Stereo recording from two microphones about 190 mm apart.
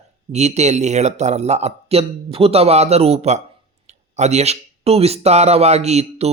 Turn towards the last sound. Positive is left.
turn(degrees=-35)  # may be behind; listen again after turning